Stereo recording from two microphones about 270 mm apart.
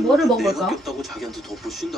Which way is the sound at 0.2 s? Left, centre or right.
Centre.